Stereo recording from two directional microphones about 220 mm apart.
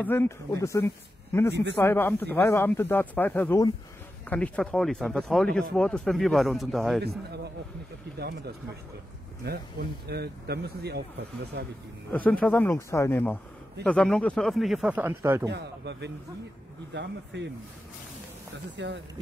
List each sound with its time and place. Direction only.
0.0 s speech: 10° left (ahead or behind)
1.5 s speech: 50° right (ahead or behind)
1.8 s speech: 10° left (ahead or behind)
7.0 s speech: 45° right (ahead or behind)
12.1 s speech: 5° left (ahead or behind); by 15.5 s 10° right (ahead or behind)
15.5 s speech: 50° right (ahead or behind)
18.8 s speech: 55° right (ahead or behind)